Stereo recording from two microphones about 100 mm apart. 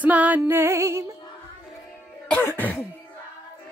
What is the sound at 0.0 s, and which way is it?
Music, 15° right (ahead or behind).